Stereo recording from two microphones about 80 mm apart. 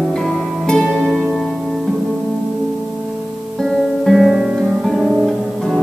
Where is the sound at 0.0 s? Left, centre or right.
Centre.